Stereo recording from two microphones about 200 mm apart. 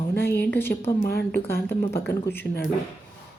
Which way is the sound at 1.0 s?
50° left (ahead or behind).